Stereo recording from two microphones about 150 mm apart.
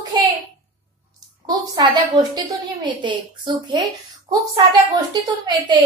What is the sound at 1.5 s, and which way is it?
A woman's voice, 25° right (ahead or behind).